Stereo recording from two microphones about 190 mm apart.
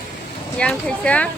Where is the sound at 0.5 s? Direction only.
5° left (ahead or behind).